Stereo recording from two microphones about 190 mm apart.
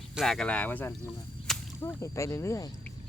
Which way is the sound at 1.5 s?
Centre (ahead or behind).